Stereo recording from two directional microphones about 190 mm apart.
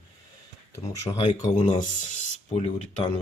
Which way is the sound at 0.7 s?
20° left (ahead or behind).